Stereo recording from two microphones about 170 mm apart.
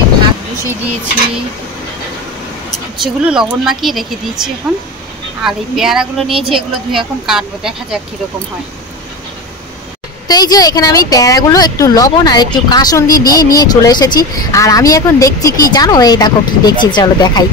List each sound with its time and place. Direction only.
3.0 s a woman's voice: 5° right (ahead or behind)
10.2 s speech: 20° left (ahead or behind)